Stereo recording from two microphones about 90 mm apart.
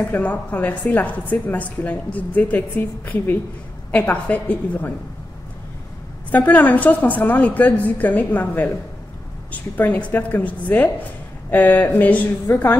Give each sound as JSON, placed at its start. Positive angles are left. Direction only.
{"t": 0.1, "sound": "a woman's voice", "side_deg": 15}
{"t": 3.9, "sound": "a woman's voice", "side_deg": 15}
{"t": 6.3, "sound": "a woman's voice", "side_deg": 20}